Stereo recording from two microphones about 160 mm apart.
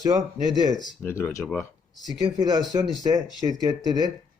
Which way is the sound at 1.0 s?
15° left (ahead or behind).